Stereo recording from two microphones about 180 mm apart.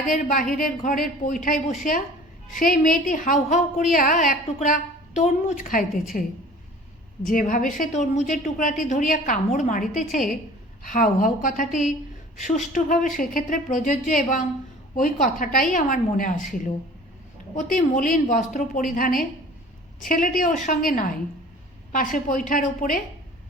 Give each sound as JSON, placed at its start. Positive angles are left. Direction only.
{"t": 0.1, "sound": "a woman's voice", "side_deg": 50}
{"t": 7.3, "sound": "a woman's voice", "side_deg": 50}